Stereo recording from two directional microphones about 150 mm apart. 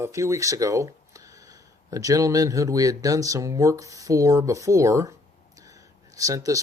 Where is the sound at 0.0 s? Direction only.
20° right (ahead or behind).